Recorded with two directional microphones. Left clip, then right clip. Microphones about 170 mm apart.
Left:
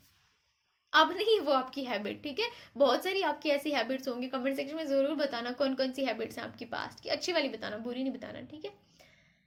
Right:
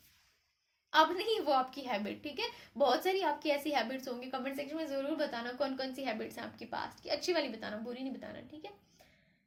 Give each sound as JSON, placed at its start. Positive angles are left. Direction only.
{"t": 0.9, "sound": "a woman's voice", "side_deg": 25}